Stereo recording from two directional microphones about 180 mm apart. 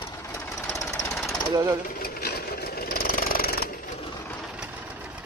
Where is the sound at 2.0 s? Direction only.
60° left (ahead or behind).